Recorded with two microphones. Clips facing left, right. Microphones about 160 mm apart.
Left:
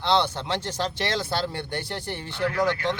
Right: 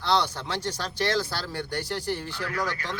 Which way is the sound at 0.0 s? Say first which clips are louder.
Left 2 dB; 25° left (ahead or behind).